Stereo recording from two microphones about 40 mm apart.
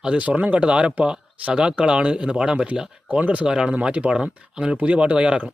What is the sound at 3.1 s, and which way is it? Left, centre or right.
Speech, right.